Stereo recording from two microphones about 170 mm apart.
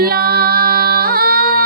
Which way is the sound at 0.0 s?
60° right (ahead or behind).